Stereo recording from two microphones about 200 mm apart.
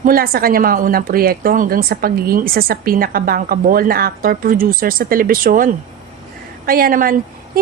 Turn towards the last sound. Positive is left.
turn(degrees=-45)  # may be behind; listen again after turning